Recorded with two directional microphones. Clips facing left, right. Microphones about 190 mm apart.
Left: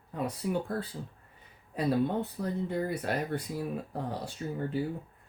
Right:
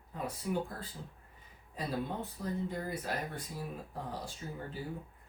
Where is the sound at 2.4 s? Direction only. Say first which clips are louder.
Left 2 dB; 65° left (ahead or behind).